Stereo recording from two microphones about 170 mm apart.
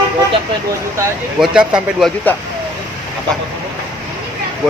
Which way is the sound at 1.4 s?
5° right (ahead or behind).